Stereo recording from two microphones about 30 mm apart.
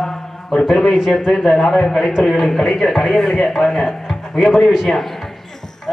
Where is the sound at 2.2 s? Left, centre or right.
Centre.